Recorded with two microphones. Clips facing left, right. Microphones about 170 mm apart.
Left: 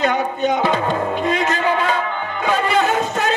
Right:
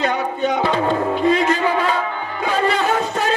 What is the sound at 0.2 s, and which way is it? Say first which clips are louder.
Speech: left 1 dB; 20° left (ahead or behind).